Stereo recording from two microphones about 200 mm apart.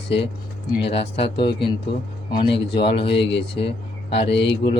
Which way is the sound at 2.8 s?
25° left (ahead or behind).